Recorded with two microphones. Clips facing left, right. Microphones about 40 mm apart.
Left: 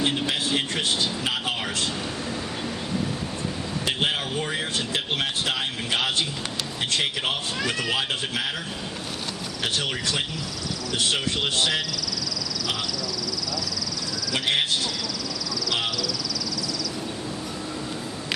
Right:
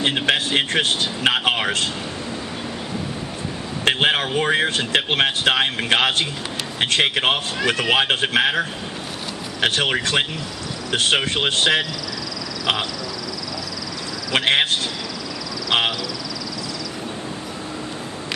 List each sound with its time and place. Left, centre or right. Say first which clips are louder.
0.0 s speech: right 5 dB; right
3.8 s speech: right 8 dB; right
14.3 s speech: right 6 dB; right